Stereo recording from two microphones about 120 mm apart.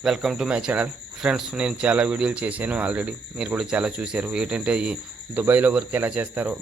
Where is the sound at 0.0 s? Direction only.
5° right (ahead or behind).